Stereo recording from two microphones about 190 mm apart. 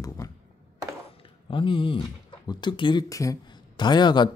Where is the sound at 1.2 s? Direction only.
25° left (ahead or behind).